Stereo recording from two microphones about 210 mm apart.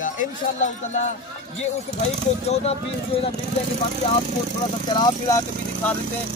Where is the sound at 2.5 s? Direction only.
30° left (ahead or behind).